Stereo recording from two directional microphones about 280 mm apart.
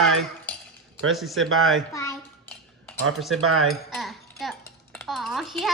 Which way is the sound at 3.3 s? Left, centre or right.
Right.